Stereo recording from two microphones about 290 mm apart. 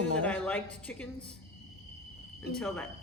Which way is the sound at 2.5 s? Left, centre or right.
Centre.